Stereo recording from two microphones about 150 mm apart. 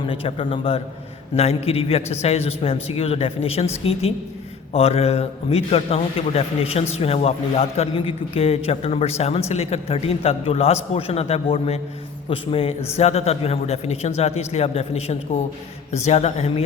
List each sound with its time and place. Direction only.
0.0 s a man's voice: 35° left (ahead or behind)